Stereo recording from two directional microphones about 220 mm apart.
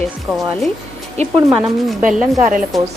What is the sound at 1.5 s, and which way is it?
Speech, centre (ahead or behind).